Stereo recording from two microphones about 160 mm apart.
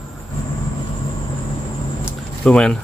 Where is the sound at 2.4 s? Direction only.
5° left (ahead or behind).